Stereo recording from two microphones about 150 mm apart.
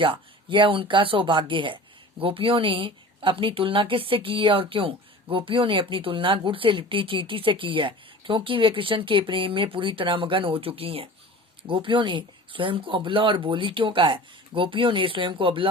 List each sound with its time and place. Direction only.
0.0 s speech: 35° right (ahead or behind)